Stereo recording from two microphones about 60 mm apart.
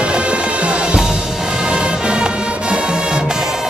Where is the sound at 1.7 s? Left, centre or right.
Centre.